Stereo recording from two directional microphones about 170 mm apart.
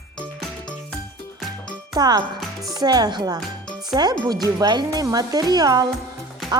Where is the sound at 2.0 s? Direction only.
25° right (ahead or behind).